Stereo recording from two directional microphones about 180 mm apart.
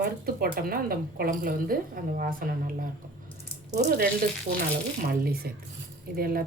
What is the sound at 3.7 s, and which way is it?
Speech, 50° right (ahead or behind).